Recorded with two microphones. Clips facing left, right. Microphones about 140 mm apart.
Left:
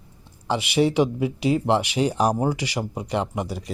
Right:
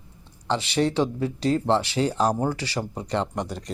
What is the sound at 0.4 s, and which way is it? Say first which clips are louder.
Speech: left 2 dB; 10° left (ahead or behind).